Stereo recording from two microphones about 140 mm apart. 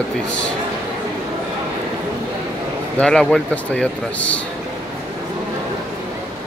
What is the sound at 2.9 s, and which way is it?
A man's voice, 5° left (ahead or behind).